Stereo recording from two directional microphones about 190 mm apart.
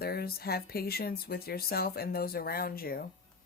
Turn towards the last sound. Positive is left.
turn(degrees=50)  # may be behind; listen again after turning